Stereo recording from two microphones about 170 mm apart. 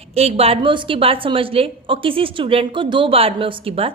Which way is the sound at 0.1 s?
35° right (ahead or behind).